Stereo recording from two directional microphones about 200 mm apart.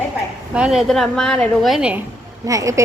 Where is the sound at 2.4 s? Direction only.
15° right (ahead or behind).